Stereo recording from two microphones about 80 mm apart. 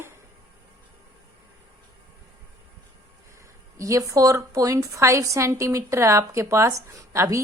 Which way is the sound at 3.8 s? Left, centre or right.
Right.